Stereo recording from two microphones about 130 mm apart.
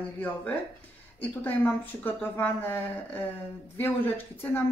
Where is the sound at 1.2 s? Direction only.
15° left (ahead or behind).